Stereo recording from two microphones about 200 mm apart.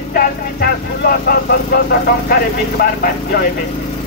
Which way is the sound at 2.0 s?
50° left (ahead or behind).